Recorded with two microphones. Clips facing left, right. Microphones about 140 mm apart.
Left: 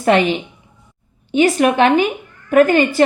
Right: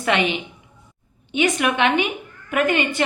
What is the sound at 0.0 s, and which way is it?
A woman's voice, 35° left (ahead or behind).